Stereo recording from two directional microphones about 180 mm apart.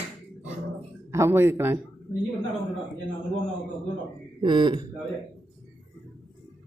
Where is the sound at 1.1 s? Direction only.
15° right (ahead or behind).